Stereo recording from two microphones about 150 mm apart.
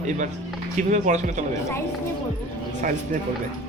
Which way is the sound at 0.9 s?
55° right (ahead or behind).